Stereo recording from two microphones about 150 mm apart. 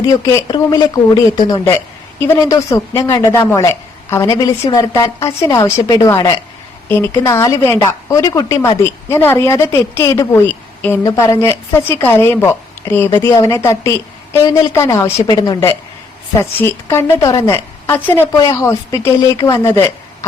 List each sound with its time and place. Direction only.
0.0 s speech: 25° left (ahead or behind)
16.4 s speech: 15° left (ahead or behind)